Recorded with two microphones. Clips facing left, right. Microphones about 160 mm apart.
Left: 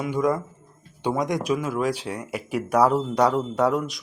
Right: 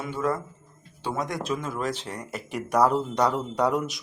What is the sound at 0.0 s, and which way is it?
Speech, 15° left (ahead or behind).